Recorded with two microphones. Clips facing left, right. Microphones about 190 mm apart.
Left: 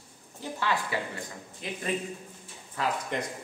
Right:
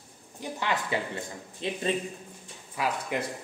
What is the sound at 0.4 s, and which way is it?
Speech, 20° right (ahead or behind).